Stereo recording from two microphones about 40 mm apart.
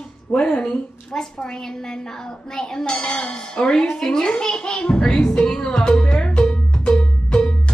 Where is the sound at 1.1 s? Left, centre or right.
Centre.